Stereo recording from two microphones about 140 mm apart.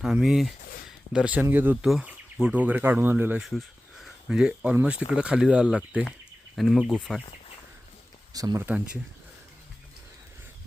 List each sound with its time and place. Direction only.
0.0 s speech: 5° right (ahead or behind)
3.4 s speech: centre (ahead or behind)
8.3 s speech: 25° right (ahead or behind)
8.6 s speech: 10° right (ahead or behind)